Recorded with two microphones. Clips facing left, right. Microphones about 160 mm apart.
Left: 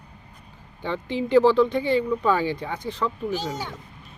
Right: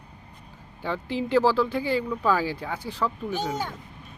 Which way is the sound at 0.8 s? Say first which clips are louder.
Left 1 dB; 5° right (ahead or behind).